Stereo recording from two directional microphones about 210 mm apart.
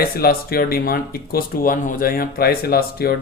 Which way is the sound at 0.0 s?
45° left (ahead or behind).